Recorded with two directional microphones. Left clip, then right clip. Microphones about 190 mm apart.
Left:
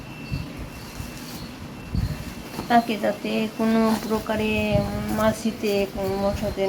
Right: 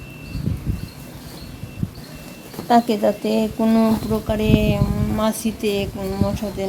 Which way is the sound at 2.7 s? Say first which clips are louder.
Right 4 dB; 45° right (ahead or behind).